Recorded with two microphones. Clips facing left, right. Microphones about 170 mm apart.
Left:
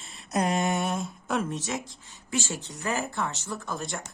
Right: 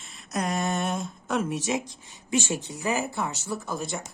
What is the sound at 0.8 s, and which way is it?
Speech, centre (ahead or behind).